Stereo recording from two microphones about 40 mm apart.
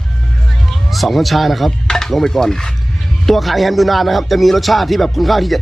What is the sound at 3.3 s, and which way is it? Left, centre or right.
Speech, centre.